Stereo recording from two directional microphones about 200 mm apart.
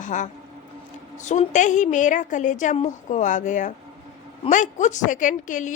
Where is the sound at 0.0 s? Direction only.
40° left (ahead or behind).